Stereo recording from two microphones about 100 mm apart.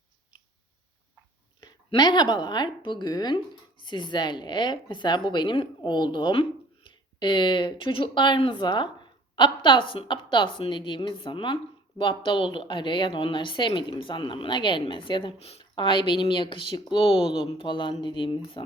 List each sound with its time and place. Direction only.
2.0 s speech: 45° left (ahead or behind)
15.4 s speech: 90° left
15.7 s speech: 55° left (ahead or behind)